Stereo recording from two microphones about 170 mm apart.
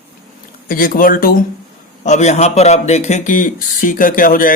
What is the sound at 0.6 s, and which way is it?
Speech, 55° left (ahead or behind).